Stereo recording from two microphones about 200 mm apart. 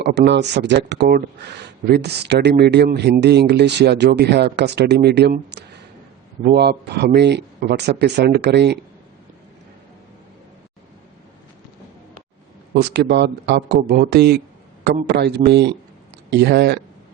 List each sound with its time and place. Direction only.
0.0 s speech: 60° right (ahead or behind)
12.8 s speech: 55° right (ahead or behind)